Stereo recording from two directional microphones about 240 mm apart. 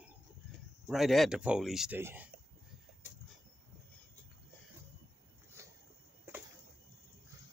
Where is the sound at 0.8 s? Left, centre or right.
Centre.